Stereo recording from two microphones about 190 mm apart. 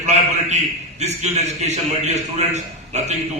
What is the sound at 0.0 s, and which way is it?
A man's voice, 40° right (ahead or behind).